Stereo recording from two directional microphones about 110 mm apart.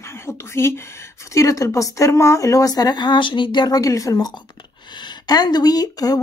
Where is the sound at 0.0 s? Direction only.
25° left (ahead or behind).